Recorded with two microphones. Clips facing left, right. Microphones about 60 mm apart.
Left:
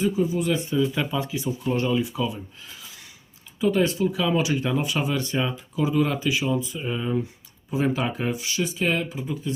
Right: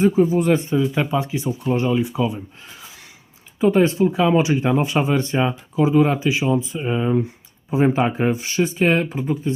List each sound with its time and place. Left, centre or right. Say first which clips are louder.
0.0 s speech: right 7 dB; right
0.8 s speech: right 4 dB; right